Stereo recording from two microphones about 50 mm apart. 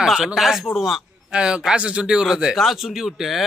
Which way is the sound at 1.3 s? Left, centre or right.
Centre.